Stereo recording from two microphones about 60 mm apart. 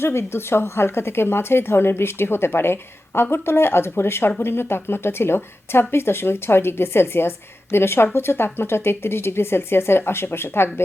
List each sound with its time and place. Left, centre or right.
0.0 s speech: left